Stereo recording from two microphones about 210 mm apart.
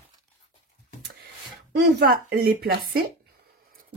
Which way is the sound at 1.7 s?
50° right (ahead or behind).